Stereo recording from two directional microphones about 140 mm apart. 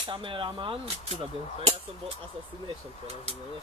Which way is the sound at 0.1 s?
35° right (ahead or behind).